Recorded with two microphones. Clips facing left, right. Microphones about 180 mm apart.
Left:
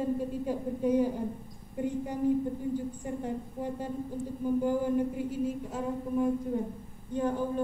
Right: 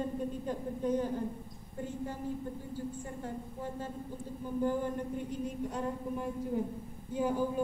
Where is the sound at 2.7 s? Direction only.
15° left (ahead or behind).